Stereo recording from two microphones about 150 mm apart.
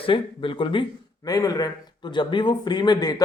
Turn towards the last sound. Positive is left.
turn(degrees=25)  # may be behind; listen again after turning